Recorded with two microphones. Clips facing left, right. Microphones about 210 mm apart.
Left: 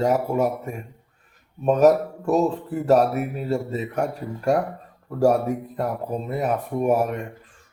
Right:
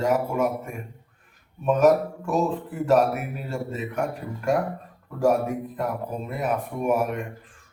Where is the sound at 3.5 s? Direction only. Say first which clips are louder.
Left 4 dB; 40° left (ahead or behind).